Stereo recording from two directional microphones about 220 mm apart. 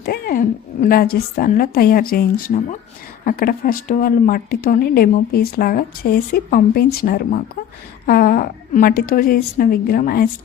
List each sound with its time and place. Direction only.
0.0 s a woman's voice: 45° left (ahead or behind)